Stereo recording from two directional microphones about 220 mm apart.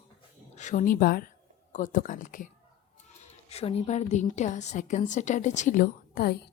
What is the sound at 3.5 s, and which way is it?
A woman's voice, 25° left (ahead or behind).